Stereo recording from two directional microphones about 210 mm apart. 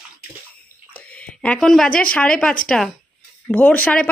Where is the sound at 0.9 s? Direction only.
5° left (ahead or behind).